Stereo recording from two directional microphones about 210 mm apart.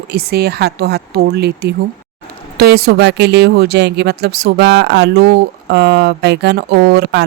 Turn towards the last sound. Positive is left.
turn(degrees=-55)  # may be behind; listen again after turning